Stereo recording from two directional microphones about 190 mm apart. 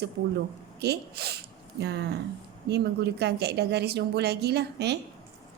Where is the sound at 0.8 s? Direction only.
55° right (ahead or behind).